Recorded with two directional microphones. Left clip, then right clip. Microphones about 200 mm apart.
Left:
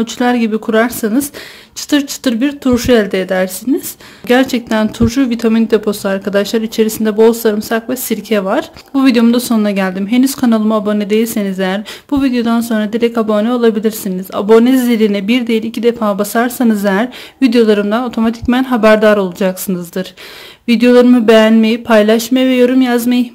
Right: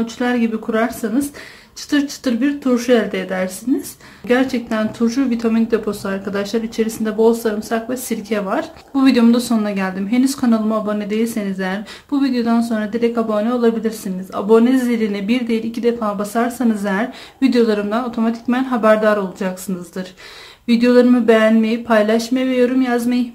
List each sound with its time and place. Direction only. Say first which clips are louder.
0.0 s speech: left 5 dB; 50° left (ahead or behind)